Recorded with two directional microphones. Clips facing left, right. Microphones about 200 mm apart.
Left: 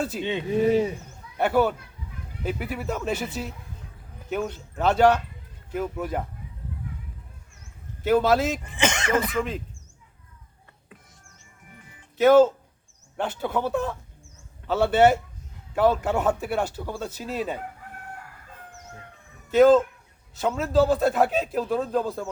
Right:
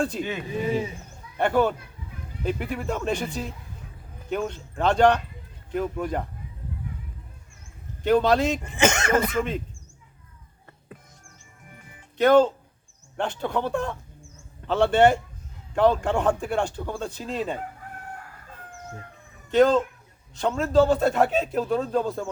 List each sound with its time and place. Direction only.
0.2 s speech: 25° left (ahead or behind)
1.4 s a child's voice: 5° left (ahead or behind)
8.0 s a man's voice: 5° left (ahead or behind)
8.7 s speech: 45° right (ahead or behind)
9.3 s a man's voice: centre (ahead or behind)
12.1 s a man's voice: 5° left (ahead or behind)
19.5 s a man's voice: 5° left (ahead or behind)